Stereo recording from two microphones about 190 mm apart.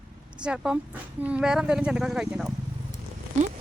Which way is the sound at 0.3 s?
5° right (ahead or behind).